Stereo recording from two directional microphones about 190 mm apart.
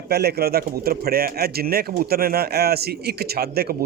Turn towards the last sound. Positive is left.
turn(degrees=-55)  # may be behind; listen again after turning